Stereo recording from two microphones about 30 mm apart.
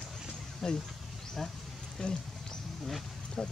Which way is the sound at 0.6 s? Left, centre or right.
Centre.